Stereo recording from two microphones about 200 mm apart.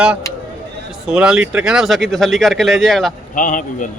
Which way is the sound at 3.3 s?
40° left (ahead or behind).